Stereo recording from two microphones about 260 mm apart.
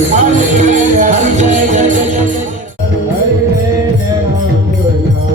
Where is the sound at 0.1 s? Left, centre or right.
Right.